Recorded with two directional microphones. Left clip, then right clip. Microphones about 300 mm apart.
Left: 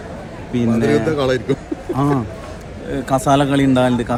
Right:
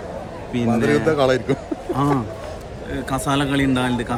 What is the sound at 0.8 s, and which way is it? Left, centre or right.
A man's voice, right.